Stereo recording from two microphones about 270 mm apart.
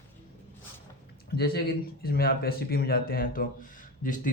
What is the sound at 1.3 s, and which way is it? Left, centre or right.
A man's voice, left.